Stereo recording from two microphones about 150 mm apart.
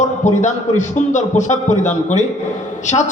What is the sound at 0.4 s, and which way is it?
A man's voice, 55° left (ahead or behind).